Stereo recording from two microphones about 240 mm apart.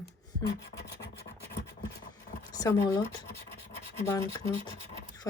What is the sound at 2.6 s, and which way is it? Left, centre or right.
Speech, centre.